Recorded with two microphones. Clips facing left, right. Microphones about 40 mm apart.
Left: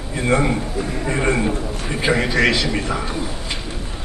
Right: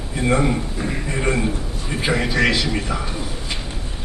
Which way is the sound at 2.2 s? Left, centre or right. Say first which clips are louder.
Left 1 dB; centre.